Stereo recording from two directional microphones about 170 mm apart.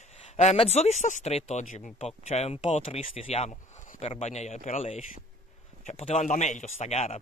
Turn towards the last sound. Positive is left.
turn(degrees=40)  # may be behind; listen again after turning